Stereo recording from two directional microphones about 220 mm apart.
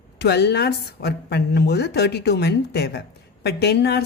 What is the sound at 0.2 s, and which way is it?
A woman's voice, 50° left (ahead or behind).